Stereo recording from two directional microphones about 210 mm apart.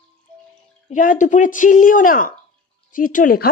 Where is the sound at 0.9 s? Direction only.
40° left (ahead or behind).